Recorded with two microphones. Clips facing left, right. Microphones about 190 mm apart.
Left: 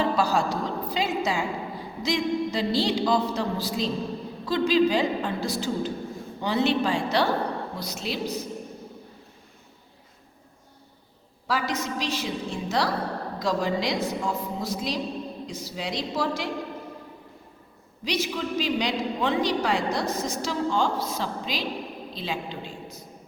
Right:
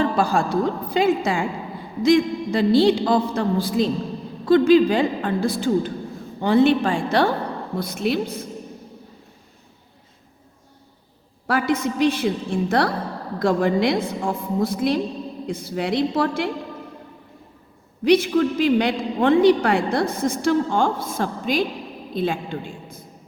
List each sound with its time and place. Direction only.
0.0 s a man's voice: 50° right (ahead or behind)
11.4 s a man's voice: 55° right (ahead or behind)
18.0 s a man's voice: 55° right (ahead or behind)